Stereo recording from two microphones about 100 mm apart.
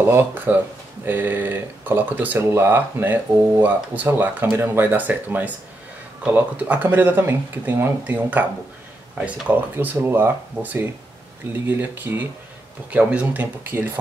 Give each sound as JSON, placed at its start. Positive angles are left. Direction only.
{"t": 0.0, "sound": "speech", "side_deg": -20}